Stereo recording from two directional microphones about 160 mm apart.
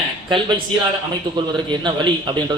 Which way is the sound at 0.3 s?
30° right (ahead or behind).